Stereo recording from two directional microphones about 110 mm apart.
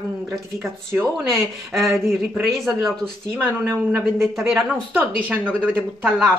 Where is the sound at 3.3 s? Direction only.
20° right (ahead or behind).